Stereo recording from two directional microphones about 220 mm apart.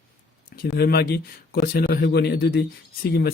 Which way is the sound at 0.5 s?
45° left (ahead or behind).